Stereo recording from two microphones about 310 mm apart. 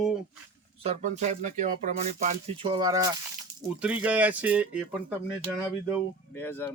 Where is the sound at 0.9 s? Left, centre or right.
Right; by 5.1 s centre.